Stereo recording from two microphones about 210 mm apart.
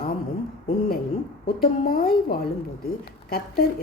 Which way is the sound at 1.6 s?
45° left (ahead or behind).